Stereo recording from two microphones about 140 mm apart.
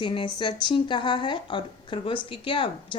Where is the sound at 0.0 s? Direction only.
35° left (ahead or behind).